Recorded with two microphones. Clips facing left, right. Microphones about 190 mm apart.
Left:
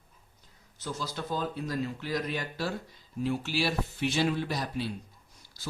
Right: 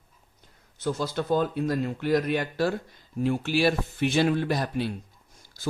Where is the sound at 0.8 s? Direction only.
55° right (ahead or behind).